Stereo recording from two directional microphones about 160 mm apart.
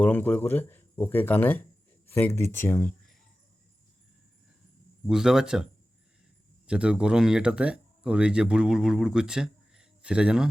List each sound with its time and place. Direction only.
0.0 s speech: 10° left (ahead or behind)
5.0 s speech: 5° right (ahead or behind)
6.7 s speech: 5° right (ahead or behind)